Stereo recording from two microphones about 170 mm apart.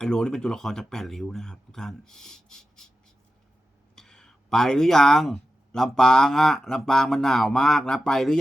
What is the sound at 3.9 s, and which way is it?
Speech, 5° left (ahead or behind).